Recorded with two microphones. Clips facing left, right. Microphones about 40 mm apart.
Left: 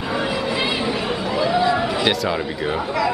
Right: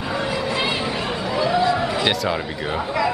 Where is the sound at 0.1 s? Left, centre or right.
Centre.